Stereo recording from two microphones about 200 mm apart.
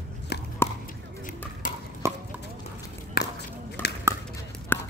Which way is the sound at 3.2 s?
50° left (ahead or behind).